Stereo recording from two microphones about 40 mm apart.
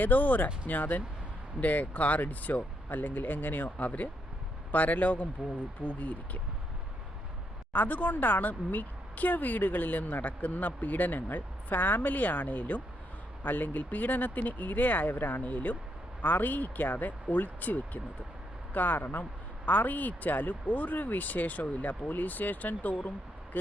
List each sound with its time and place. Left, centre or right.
0.0 s speech: left
7.7 s speech: left
15.4 s speech: left